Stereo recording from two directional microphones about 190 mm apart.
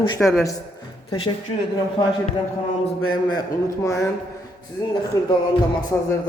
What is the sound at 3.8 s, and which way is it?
Speech, 15° left (ahead or behind).